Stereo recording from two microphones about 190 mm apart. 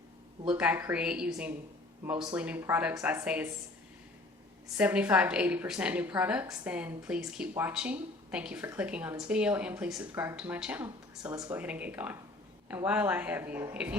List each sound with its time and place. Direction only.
0.5 s a woman's voice: 10° right (ahead or behind)
4.8 s a woman's voice: 10° right (ahead or behind)
11.3 s speech: 20° right (ahead or behind)
11.6 s a woman's voice: 5° right (ahead or behind)